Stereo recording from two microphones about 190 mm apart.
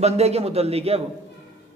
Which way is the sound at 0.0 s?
35° right (ahead or behind).